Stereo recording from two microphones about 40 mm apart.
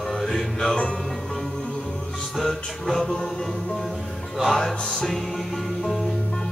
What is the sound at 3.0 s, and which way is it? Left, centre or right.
Music, centre.